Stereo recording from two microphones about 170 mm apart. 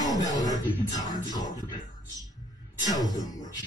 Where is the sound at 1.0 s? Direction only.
20° left (ahead or behind).